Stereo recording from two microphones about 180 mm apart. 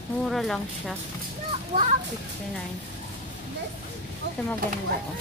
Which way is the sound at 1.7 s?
40° right (ahead or behind).